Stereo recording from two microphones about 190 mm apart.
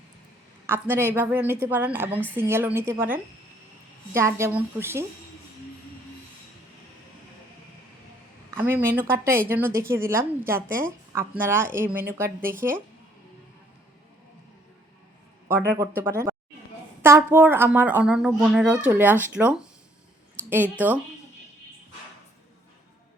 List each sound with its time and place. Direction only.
0.7 s a woman's voice: 10° right (ahead or behind)
8.5 s a woman's voice: 10° right (ahead or behind)
12.4 s speech: 50° right (ahead or behind)
15.4 s a woman's voice: 10° right (ahead or behind)
20.8 s a woman's voice: 10° right (ahead or behind)